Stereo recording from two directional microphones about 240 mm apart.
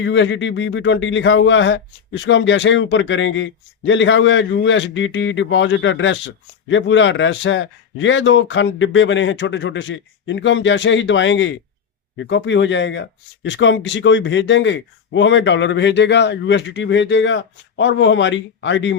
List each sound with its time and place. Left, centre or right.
0.0 s speech: left